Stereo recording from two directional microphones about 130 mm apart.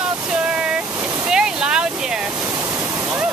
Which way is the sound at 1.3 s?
5° right (ahead or behind).